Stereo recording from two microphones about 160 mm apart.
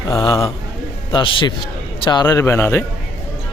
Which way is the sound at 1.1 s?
30° left (ahead or behind).